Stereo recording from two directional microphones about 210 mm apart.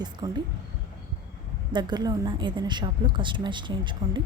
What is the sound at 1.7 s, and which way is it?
A woman's voice, 20° right (ahead or behind).